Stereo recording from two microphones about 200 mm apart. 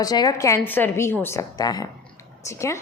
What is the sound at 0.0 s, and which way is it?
A woman's voice, 20° left (ahead or behind).